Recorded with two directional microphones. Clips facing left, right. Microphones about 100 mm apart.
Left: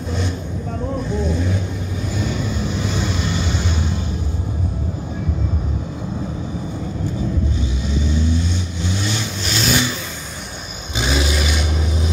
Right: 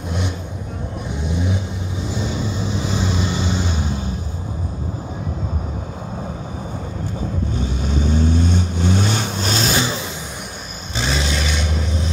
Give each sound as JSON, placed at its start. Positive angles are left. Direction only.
{"t": 1.0, "sound": "vehicle", "side_deg": -15}
{"t": 7.5, "sound": "vehicle", "side_deg": -50}
{"t": 11.0, "sound": "vehicle", "side_deg": 5}